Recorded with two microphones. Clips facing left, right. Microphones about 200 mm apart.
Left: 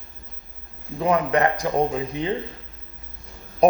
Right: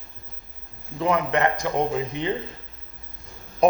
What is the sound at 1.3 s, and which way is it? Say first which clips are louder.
Speech: left 2 dB; 35° left (ahead or behind).